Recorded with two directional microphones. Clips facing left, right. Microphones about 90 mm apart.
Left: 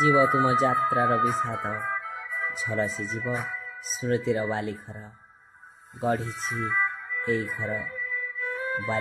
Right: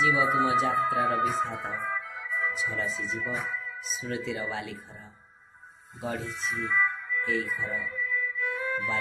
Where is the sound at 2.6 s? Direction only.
40° left (ahead or behind).